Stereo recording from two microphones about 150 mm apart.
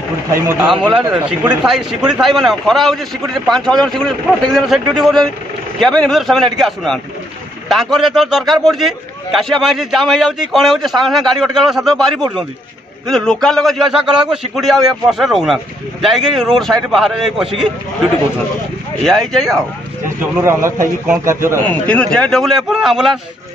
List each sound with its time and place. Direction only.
0.3 s a man's voice: 20° right (ahead or behind)
1.1 s a man's voice: 10° right (ahead or behind)
19.0 s a man's voice: centre (ahead or behind)
20.4 s a man's voice: 20° right (ahead or behind)
21.6 s a man's voice: 10° left (ahead or behind)